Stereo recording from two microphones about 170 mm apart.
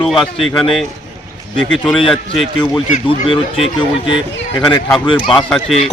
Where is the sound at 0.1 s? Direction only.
Centre (ahead or behind).